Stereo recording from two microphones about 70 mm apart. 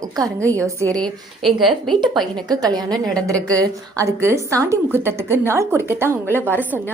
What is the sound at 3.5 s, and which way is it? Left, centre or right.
A woman's voice, right.